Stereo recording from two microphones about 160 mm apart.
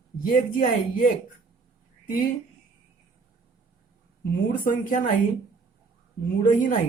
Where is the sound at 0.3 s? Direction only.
60° left (ahead or behind).